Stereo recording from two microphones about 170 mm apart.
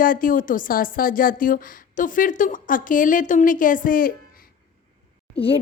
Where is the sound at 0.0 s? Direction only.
55° left (ahead or behind).